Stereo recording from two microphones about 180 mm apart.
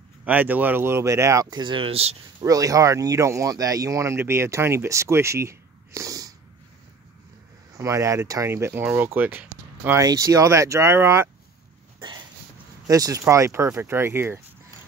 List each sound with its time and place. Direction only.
0.2 s speech: 10° right (ahead or behind); by 2.1 s 35° right (ahead or behind)
2.4 s speech: 20° right (ahead or behind)
7.7 s speech: 15° right (ahead or behind)
12.8 s speech: 20° right (ahead or behind)